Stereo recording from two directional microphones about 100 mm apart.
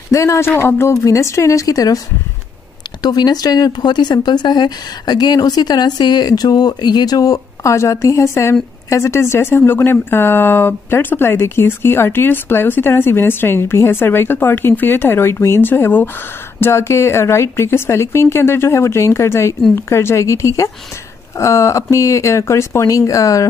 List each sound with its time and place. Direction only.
0.1 s speech: 30° left (ahead or behind)
3.0 s speech: 45° left (ahead or behind)